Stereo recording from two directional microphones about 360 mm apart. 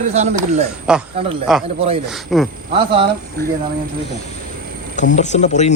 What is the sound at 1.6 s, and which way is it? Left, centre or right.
Speech, centre.